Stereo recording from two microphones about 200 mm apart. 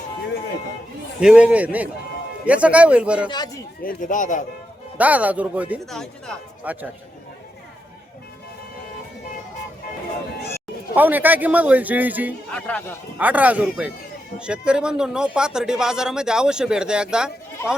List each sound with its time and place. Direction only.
1.2 s a man's voice: 5° right (ahead or behind)
3.2 s speech: 20° left (ahead or behind)
3.8 s speech: 40° left (ahead or behind)
4.9 s a man's voice: 5° right (ahead or behind)
10.9 s a man's voice: 10° right (ahead or behind)
12.5 s speech: 5° left (ahead or behind)
13.1 s a man's voice: 10° right (ahead or behind)